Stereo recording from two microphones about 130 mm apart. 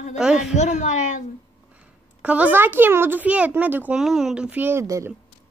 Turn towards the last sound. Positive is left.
turn(degrees=-20)  # may be behind; listen again after turning